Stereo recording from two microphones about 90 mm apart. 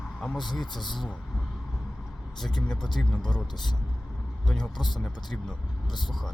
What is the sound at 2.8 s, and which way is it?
Speech, 55° left (ahead or behind).